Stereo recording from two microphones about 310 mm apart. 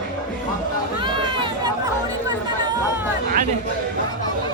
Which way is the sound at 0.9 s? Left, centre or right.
Centre.